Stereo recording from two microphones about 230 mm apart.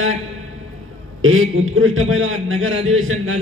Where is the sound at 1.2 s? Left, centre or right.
Right.